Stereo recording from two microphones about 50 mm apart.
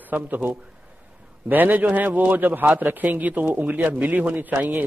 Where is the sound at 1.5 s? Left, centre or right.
Right.